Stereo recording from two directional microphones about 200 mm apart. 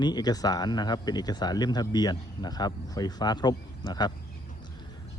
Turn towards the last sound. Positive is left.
turn(degrees=20)  # may be behind; listen again after turning